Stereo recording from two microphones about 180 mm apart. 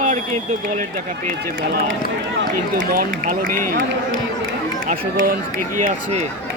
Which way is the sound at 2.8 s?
50° right (ahead or behind).